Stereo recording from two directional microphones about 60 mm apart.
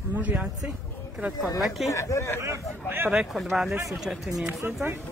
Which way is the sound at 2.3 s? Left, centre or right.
Right.